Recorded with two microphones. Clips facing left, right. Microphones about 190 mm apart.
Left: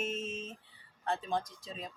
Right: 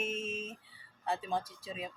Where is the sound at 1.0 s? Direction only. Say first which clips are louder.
Left 1 dB; 5° right (ahead or behind).